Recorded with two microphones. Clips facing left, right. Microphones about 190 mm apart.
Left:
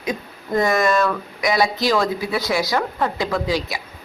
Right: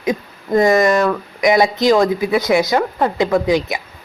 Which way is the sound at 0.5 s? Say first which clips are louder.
Right 5 dB; 20° right (ahead or behind).